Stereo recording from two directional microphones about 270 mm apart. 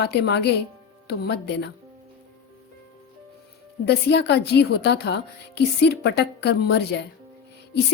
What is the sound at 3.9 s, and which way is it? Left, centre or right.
A woman's voice, left.